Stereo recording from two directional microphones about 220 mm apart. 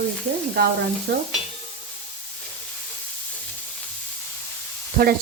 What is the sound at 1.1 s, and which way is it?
Sizzle, 45° right (ahead or behind).